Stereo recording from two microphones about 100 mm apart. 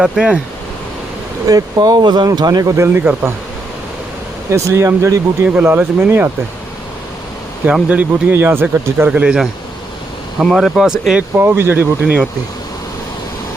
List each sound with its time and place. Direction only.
0.0 s speech: 10° right (ahead or behind)
1.5 s speech: 40° right (ahead or behind)
2.7 s speech: 25° right (ahead or behind)
4.5 s speech: 30° right (ahead or behind)
7.6 s speech: 15° right (ahead or behind)
9.0 s speech: 10° right (ahead or behind)
11.2 s speech: 20° right (ahead or behind)